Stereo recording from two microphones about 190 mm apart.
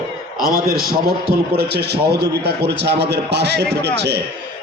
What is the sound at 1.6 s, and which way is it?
A man's voice, 60° right (ahead or behind).